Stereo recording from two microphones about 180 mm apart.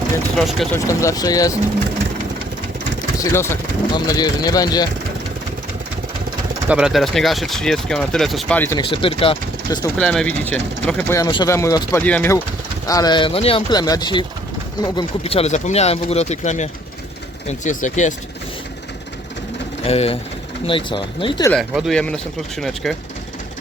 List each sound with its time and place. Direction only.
0.3 s speech: centre (ahead or behind)
0.9 s speech: 20° left (ahead or behind)
3.3 s speech: 15° left (ahead or behind)
6.7 s speech: 5° right (ahead or behind); by 8.8 s 10° left (ahead or behind)
8.8 s speech: 30° left (ahead or behind)
10.0 s speech: 5° left (ahead or behind)
11.1 s speech: 20° left (ahead or behind)
12.9 s speech: 20° left (ahead or behind); by 18.1 s 45° left (ahead or behind)
19.8 s speech: 35° left (ahead or behind)
21.5 s speech: centre (ahead or behind)